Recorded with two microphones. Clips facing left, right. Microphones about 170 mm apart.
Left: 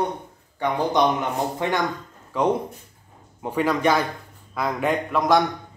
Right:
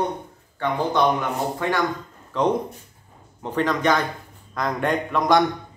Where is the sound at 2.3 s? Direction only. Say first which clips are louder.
Even; 10° left (ahead or behind).